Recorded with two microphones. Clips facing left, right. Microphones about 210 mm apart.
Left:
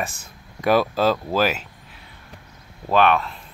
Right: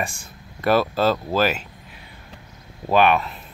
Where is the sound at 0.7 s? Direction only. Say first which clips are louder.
Even; 10° left (ahead or behind).